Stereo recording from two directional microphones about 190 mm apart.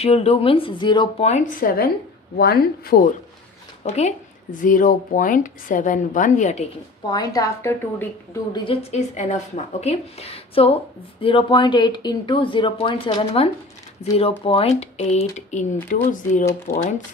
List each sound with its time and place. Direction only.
0.0 s speech: 30° left (ahead or behind)
1.3 s speech: 45° left (ahead or behind)
3.8 s speech: 35° left (ahead or behind)
7.2 s a woman's voice: 20° left (ahead or behind)
8.6 s speech: 35° left (ahead or behind)